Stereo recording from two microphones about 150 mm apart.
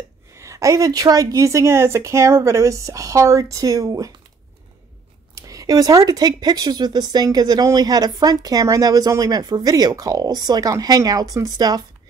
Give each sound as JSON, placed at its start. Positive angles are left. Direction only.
{"t": 0.4, "sound": "speech", "side_deg": -20}
{"t": 5.3, "sound": "speech", "side_deg": -20}